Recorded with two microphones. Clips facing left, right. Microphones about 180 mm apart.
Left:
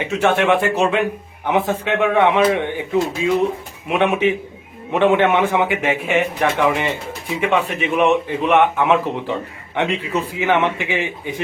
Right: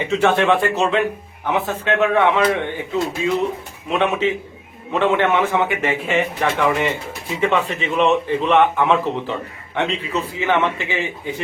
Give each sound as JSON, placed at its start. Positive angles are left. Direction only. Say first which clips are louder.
{"t": 0.2, "sound": "a man's voice", "louder": "left 1 dB", "side_deg": 15}
{"t": 3.8, "sound": "a man's voice", "louder": "left 2 dB", "side_deg": 15}